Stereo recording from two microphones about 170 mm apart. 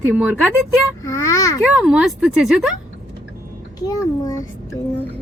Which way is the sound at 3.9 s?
20° left (ahead or behind).